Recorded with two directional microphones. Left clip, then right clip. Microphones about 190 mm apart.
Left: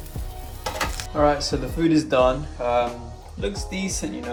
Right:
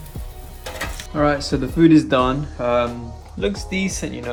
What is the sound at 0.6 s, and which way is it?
Speech, centre (ahead or behind).